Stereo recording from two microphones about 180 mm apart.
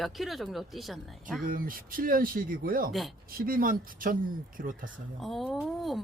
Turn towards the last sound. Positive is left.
turn(degrees=0)  # may be behind; listen again after turning